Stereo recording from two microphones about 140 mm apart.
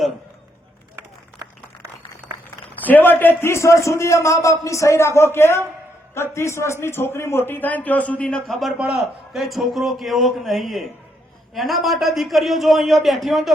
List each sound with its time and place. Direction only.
2.8 s a man's voice: 15° left (ahead or behind)